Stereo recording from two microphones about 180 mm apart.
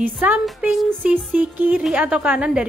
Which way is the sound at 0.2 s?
5° right (ahead or behind).